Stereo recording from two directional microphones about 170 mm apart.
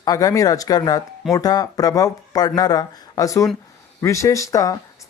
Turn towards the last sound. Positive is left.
turn(degrees=20)  # may be behind; listen again after turning